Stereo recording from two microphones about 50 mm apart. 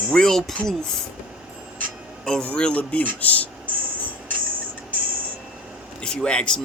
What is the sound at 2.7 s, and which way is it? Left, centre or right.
Speech, left.